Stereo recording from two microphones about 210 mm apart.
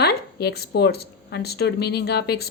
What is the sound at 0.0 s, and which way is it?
A woman's voice, 50° left (ahead or behind).